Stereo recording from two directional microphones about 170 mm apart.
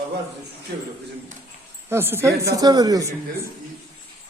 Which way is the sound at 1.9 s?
15° right (ahead or behind).